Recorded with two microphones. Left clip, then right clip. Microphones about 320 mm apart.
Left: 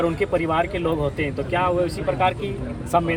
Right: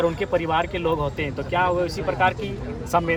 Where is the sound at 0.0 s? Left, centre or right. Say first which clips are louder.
Left 1 dB; right.